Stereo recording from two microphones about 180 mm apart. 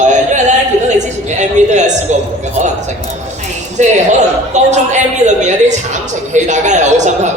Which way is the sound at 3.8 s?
40° right (ahead or behind).